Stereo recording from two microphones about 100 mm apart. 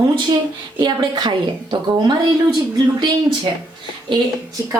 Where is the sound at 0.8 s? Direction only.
45° right (ahead or behind).